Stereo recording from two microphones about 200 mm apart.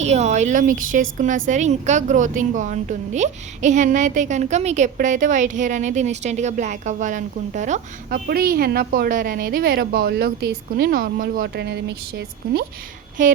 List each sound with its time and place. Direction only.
0.0 s a woman's voice: 35° right (ahead or behind); by 12.6 s 55° right (ahead or behind)